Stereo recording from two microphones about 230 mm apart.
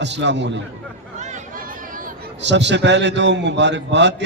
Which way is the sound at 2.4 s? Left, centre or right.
Right.